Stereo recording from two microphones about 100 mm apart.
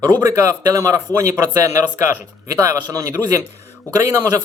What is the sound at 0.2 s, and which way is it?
Speech, 30° right (ahead or behind).